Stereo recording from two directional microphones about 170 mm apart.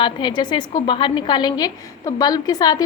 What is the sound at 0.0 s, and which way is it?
A woman's voice, 25° left (ahead or behind).